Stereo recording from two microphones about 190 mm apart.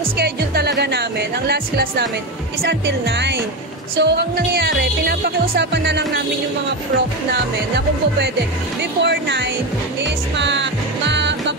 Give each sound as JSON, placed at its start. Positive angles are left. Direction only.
{"t": 0.2, "sound": "music", "side_deg": -60}
{"t": 1.5, "sound": "speech", "side_deg": -60}
{"t": 9.0, "sound": "speech", "side_deg": -65}
{"t": 10.0, "sound": "music", "side_deg": -70}